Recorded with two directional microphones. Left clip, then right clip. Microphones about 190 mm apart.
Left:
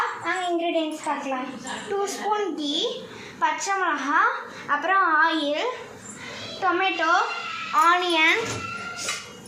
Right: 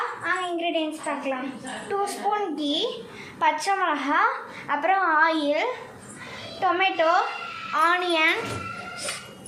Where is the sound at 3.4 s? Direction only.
30° right (ahead or behind).